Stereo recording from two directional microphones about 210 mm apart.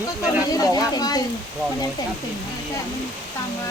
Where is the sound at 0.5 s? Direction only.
15° left (ahead or behind).